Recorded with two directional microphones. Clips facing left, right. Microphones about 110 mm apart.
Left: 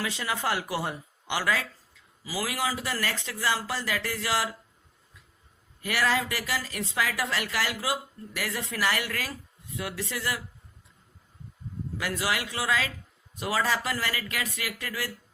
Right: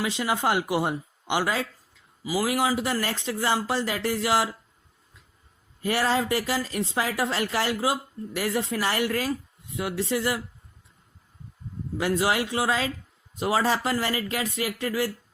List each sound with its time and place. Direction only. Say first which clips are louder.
0.0 s speech: right 5 dB; 20° right (ahead or behind)
5.8 s speech: right 3 dB; 30° right (ahead or behind)
11.9 s speech: right 6 dB; 25° right (ahead or behind)